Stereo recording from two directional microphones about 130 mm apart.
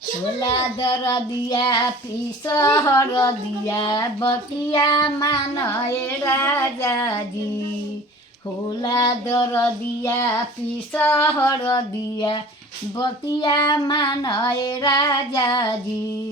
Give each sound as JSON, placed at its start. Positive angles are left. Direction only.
{"t": 0.3, "sound": "child singing", "side_deg": 30}
{"t": 8.8, "sound": "child singing", "side_deg": 30}
{"t": 13.0, "sound": "child singing", "side_deg": 35}